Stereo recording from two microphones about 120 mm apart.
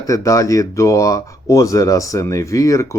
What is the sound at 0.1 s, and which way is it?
Speech, 25° left (ahead or behind).